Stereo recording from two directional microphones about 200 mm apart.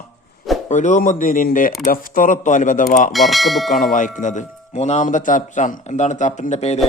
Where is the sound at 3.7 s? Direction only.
40° left (ahead or behind).